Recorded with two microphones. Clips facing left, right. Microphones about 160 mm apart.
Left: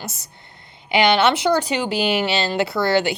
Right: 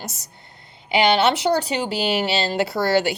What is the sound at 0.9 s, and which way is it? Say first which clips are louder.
Speech: left 1 dB; 35° right (ahead or behind).